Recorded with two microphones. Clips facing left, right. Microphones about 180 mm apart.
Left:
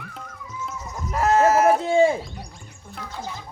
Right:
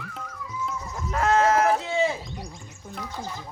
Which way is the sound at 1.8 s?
50° left (ahead or behind).